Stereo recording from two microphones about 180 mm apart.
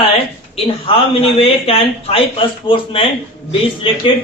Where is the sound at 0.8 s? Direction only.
30° left (ahead or behind).